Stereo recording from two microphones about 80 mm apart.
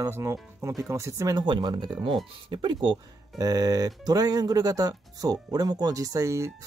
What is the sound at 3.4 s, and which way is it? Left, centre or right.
Speech, right.